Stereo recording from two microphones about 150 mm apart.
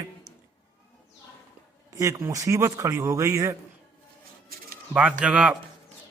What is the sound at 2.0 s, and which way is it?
A man's voice, 20° right (ahead or behind).